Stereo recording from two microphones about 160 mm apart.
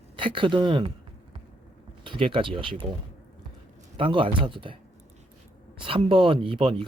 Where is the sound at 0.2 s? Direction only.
30° right (ahead or behind).